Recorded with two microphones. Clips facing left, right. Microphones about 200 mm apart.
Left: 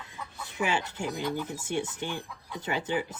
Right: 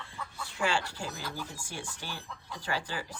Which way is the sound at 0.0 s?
20° left (ahead or behind).